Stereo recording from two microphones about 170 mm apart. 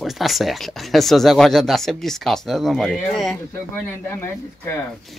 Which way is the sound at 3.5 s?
15° left (ahead or behind).